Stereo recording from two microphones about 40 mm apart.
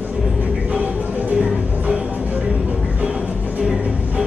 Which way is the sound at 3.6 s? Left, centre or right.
Centre.